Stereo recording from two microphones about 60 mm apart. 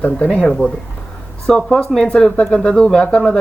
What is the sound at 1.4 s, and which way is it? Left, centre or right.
Speech, centre.